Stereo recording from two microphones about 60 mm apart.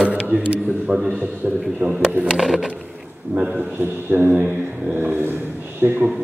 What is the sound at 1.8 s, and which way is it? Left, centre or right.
Speech, right.